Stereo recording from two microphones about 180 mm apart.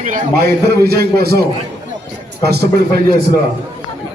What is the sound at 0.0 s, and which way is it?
A man's voice, 50° right (ahead or behind).